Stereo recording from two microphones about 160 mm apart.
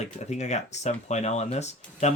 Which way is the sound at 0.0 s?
45° left (ahead or behind).